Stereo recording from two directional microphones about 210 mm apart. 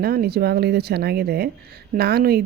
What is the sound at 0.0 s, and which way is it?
A woman's voice, 50° right (ahead or behind).